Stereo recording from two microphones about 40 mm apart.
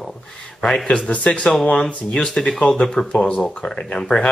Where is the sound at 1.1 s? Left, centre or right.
Left.